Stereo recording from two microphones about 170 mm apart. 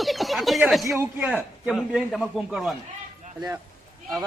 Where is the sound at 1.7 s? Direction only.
Centre (ahead or behind).